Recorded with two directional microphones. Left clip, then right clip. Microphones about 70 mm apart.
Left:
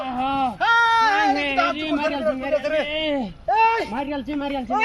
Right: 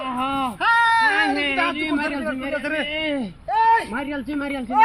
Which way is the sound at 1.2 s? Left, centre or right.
Right.